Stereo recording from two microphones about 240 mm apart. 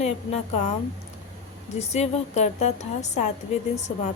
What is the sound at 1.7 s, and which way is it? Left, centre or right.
Speech, left.